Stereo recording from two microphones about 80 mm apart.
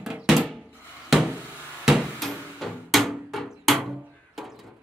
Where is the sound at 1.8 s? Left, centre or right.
Centre.